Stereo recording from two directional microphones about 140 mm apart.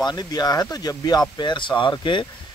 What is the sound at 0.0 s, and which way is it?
Speech, 30° left (ahead or behind).